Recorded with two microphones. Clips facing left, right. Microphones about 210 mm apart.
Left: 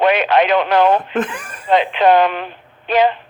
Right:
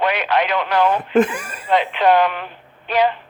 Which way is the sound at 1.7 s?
25° left (ahead or behind).